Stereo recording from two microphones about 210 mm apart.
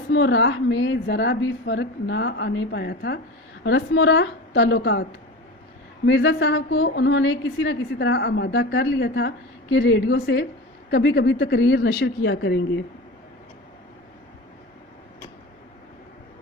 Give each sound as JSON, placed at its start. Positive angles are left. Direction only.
{"t": 0.1, "sound": "a woman's voice", "side_deg": 60}
{"t": 6.1, "sound": "a woman's voice", "side_deg": 60}